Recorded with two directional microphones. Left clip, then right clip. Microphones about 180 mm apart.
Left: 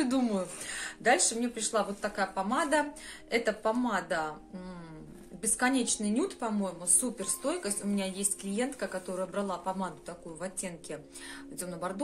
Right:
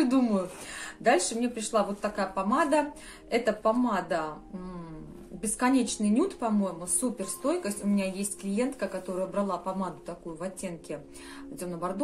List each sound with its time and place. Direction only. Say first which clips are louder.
0.0 s a woman's voice: right 4 dB; 20° left (ahead or behind)
5.4 s a woman's voice: right 3 dB; 20° left (ahead or behind)